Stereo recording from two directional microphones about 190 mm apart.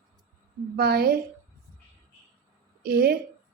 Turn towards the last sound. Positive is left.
turn(degrees=-55)  # may be behind; listen again after turning